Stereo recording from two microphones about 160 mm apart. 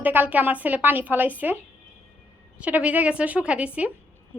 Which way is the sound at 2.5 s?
10° right (ahead or behind).